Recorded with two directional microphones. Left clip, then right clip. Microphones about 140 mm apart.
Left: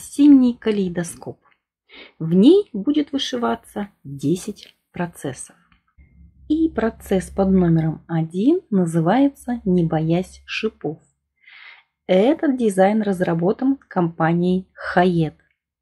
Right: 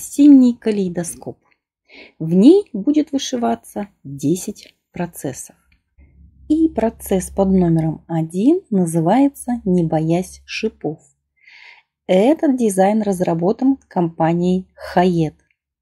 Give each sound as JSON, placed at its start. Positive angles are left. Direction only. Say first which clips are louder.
{"t": 0.0, "sound": "a woman's voice", "louder": "right 3 dB", "side_deg": -40}
{"t": 6.5, "sound": "a woman's voice", "louder": "right 3 dB", "side_deg": -40}